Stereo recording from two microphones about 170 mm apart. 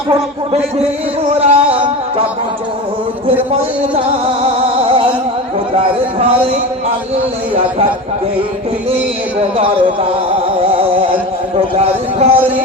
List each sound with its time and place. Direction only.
1.3 s music: 40° right (ahead or behind)
4.8 s music: 35° right (ahead or behind)
5.7 s speech: 35° right (ahead or behind)
9.6 s speech: 35° right (ahead or behind)
10.6 s carnatic music: 35° right (ahead or behind)
11.7 s speech: 35° right (ahead or behind)
12.4 s speech: 10° right (ahead or behind)